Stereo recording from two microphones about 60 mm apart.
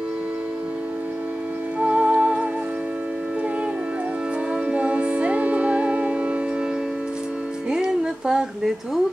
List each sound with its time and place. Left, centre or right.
1.8 s music: right
4.6 s music: right
7.7 s a sound: centre